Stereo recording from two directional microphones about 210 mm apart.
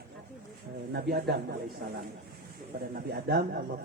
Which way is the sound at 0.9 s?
50° right (ahead or behind).